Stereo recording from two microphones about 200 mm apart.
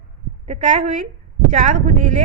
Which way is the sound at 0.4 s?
35° right (ahead or behind).